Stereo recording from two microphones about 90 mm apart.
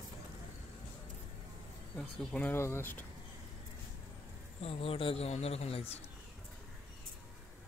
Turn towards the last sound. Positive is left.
turn(degrees=90)